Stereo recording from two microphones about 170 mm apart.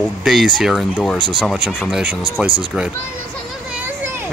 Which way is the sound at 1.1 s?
30° right (ahead or behind).